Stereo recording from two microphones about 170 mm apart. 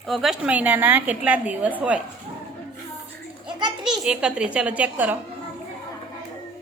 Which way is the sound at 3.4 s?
25° right (ahead or behind).